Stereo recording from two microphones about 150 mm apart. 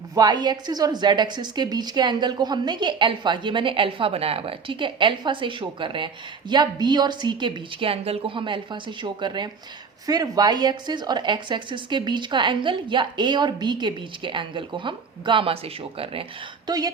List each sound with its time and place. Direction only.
0.1 s speech: 25° right (ahead or behind)
16.6 s speech: 25° right (ahead or behind)